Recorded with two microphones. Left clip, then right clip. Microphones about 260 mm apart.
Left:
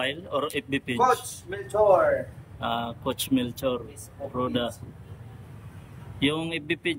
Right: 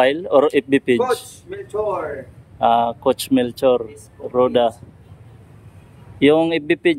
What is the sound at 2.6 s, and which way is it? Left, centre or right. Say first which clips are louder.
Speech: right 14 dB; centre.